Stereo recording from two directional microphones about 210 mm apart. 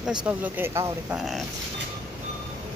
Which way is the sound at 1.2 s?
Centre (ahead or behind).